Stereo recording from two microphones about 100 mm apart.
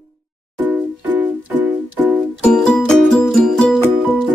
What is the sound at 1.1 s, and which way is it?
Music, 20° right (ahead or behind).